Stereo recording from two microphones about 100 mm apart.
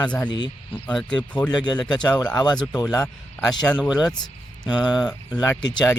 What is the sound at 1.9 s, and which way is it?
Speech, 45° left (ahead or behind).